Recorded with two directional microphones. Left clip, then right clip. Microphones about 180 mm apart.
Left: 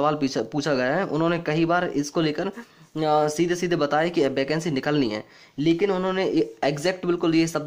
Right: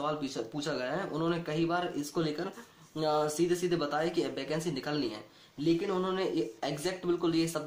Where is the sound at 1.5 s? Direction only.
90° left.